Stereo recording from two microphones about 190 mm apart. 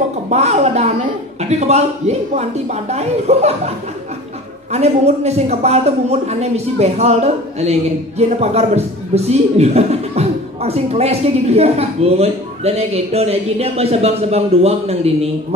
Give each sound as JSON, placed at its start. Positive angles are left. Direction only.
{"t": 0.3, "sound": "a man's voice", "side_deg": -35}
{"t": 4.7, "sound": "a man's voice", "side_deg": -35}